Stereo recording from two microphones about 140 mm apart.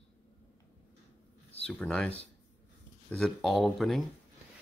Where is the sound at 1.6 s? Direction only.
10° left (ahead or behind).